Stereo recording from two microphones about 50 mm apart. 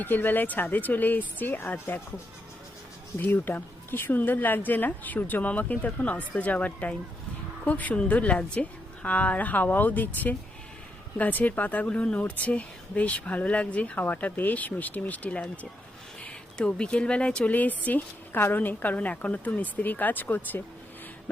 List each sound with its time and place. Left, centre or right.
0.0 s a woman's voice: left
3.2 s a woman's voice: left
16.6 s speech: centre; by 18.3 s left
18.3 s a woman's voice: left
18.6 s a woman's voice: left